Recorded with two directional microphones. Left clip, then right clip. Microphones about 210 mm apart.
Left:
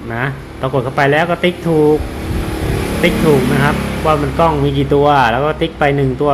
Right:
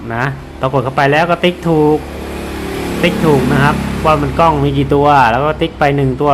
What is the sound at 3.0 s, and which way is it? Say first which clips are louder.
Speech: even; 10° right (ahead or behind).